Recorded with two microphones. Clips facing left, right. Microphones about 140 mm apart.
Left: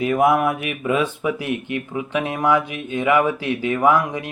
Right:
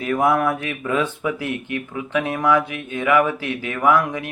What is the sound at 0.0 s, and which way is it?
Speech, 20° left (ahead or behind).